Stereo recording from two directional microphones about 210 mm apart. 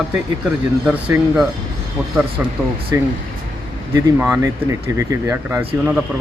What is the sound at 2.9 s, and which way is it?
Speech, 15° right (ahead or behind).